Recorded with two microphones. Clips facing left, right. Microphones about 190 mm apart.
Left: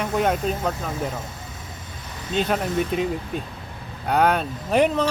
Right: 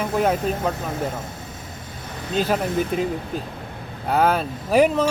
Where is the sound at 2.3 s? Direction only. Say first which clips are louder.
Right 1 dB; 5° right (ahead or behind).